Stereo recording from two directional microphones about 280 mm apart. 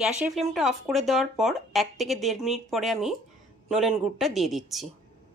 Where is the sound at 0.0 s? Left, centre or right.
Centre.